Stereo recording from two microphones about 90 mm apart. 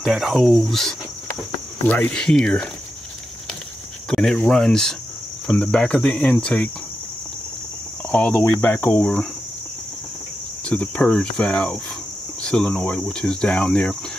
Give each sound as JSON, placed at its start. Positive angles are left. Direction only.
{"t": 0.0, "sound": "speech", "side_deg": 0}
{"t": 1.9, "sound": "speech", "side_deg": 15}
{"t": 4.1, "sound": "speech", "side_deg": 5}
{"t": 8.1, "sound": "speech", "side_deg": 15}
{"t": 8.5, "sound": "cricket", "side_deg": 25}
{"t": 10.6, "sound": "speech", "side_deg": 15}